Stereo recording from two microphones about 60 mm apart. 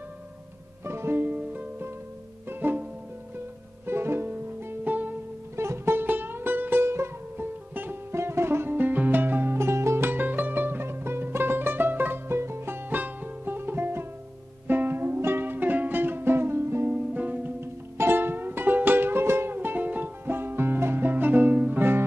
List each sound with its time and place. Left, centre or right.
0.8 s music: right
1.2 s music: right
3.8 s music: right
5.6 s music: right
5.9 s music: right
7.7 s music: right
8.1 s music: right
17.1 s music: right
17.6 s music: right